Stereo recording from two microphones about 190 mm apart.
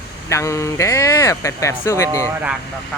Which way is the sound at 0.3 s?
15° left (ahead or behind).